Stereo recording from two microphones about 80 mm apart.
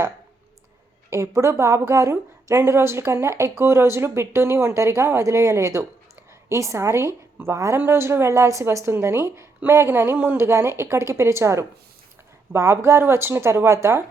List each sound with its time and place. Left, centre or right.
1.1 s a woman's voice: right